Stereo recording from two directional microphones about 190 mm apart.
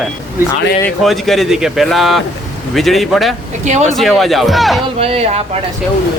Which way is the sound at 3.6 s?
40° right (ahead or behind).